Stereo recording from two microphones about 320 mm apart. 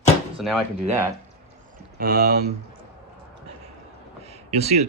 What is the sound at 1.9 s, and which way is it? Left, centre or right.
Speech, right.